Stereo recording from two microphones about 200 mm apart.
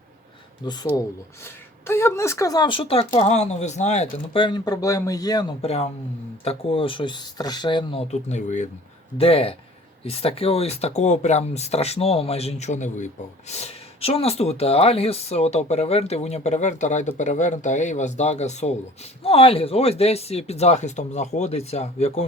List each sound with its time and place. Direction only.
0.6 s speech: 20° left (ahead or behind)
1.9 s speech: 15° left (ahead or behind); by 4.4 s 35° left (ahead or behind)
4.4 s speech: 20° left (ahead or behind)
5.6 s speech: 30° left (ahead or behind)